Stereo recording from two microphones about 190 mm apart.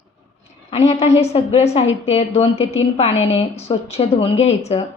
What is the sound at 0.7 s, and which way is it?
A woman's voice, 30° left (ahead or behind).